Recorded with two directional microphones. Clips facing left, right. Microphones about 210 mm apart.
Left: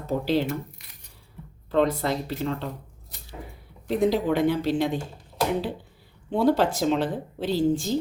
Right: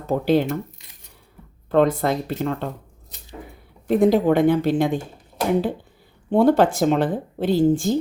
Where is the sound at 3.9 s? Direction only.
50° right (ahead or behind).